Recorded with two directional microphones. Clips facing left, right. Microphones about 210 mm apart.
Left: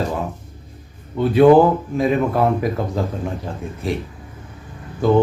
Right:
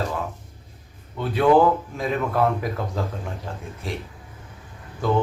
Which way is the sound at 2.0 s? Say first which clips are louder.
Left 5 dB; 10° left (ahead or behind).